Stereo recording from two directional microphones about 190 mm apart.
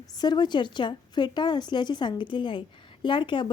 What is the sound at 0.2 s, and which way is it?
A woman's voice, 20° left (ahead or behind).